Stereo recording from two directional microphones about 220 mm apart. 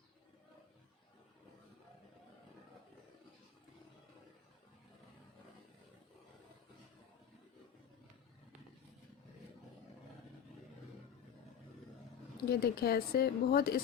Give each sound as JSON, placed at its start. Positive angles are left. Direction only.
{"t": 12.5, "sound": "a woman's voice", "side_deg": 45}